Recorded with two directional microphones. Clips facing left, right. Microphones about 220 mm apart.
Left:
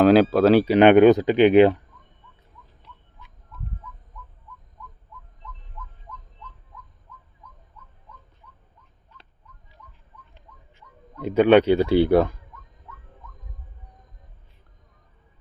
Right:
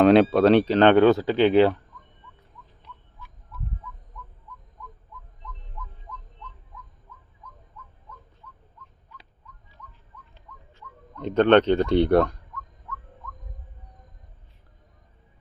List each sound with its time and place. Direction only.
0.0 s speech: centre (ahead or behind)
10.5 s bird: 25° left (ahead or behind)
11.2 s speech: 10° left (ahead or behind)